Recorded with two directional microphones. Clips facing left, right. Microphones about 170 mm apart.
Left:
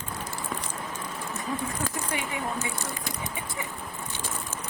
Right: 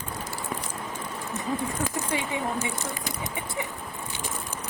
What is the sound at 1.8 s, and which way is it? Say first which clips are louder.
Speech: right 3 dB; 25° right (ahead or behind).